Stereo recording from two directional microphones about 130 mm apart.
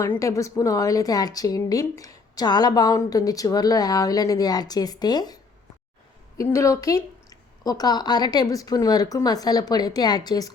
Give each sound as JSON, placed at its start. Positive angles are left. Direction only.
{"t": 0.0, "sound": "a woman's voice", "side_deg": 25}